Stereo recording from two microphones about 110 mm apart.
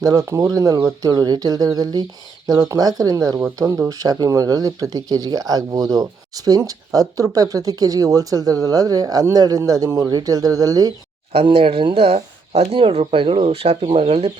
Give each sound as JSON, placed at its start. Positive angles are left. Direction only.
{"t": 0.0, "sound": "speech", "side_deg": -30}
{"t": 11.4, "sound": "speech", "side_deg": -55}